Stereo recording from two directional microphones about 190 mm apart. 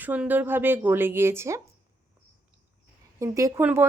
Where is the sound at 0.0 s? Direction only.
10° right (ahead or behind).